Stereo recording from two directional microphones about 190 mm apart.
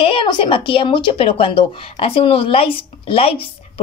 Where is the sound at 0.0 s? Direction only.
25° left (ahead or behind).